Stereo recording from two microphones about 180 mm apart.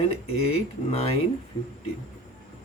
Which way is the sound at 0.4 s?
35° left (ahead or behind).